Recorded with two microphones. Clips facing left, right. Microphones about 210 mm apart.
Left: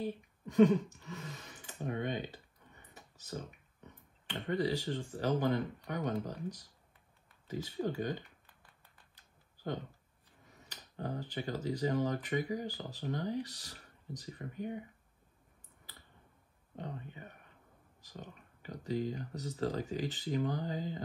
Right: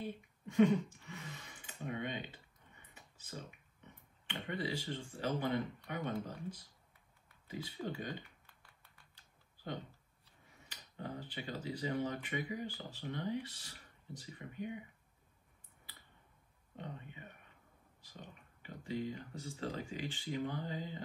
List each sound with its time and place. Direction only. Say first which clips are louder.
1.0 s a sound: left 4 dB; 40° left (ahead or behind)
4.3 s speech: left 6 dB; 40° left (ahead or behind)
10.7 s speech: left 5 dB; 40° left (ahead or behind)
16.7 s speech: left 4 dB; 40° left (ahead or behind)